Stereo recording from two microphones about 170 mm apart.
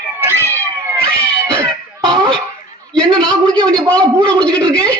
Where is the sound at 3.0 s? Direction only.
25° right (ahead or behind).